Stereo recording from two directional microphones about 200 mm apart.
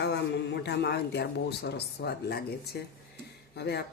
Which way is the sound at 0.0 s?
55° left (ahead or behind).